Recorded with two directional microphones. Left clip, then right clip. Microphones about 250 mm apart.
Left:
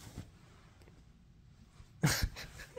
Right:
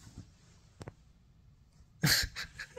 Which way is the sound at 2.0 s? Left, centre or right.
Centre.